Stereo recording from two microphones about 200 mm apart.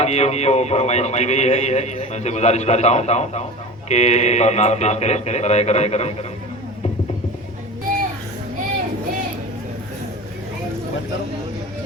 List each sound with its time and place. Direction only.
0.0 s a man's voice: 35° left (ahead or behind)